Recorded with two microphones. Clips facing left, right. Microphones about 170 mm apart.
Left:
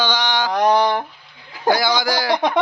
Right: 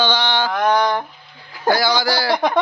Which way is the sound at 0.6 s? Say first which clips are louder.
Left 2 dB; 35° left (ahead or behind).